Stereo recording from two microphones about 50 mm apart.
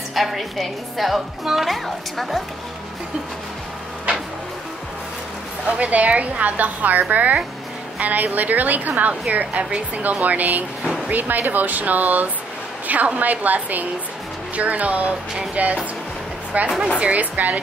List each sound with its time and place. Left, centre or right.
0.1 s a woman's voice: centre
5.7 s a woman's voice: right